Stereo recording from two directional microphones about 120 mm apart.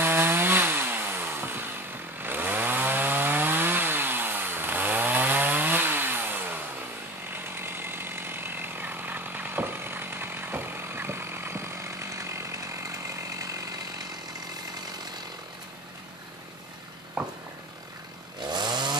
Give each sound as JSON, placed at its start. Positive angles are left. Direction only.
{"t": 0.0, "sound": "chainsaw", "side_deg": -20}
{"t": 17.2, "sound": "a sound", "side_deg": -10}
{"t": 18.4, "sound": "chainsaw", "side_deg": -35}